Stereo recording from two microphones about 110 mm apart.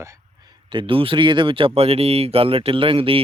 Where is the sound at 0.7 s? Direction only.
50° right (ahead or behind).